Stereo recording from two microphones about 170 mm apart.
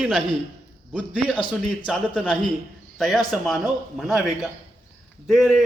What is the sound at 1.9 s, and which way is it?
Speech, centre (ahead or behind).